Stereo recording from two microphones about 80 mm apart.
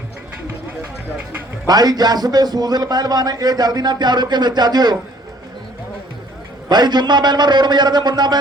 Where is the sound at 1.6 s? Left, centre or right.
Right.